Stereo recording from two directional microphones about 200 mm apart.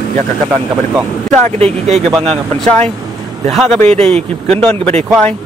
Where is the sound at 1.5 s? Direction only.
30° right (ahead or behind).